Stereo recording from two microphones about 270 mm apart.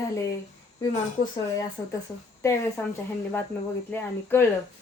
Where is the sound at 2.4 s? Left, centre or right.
Centre.